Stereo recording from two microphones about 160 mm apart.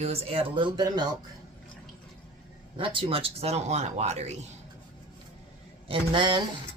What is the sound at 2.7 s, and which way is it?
Speech, 30° right (ahead or behind).